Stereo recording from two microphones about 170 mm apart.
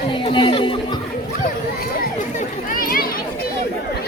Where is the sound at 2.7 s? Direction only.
55° left (ahead or behind).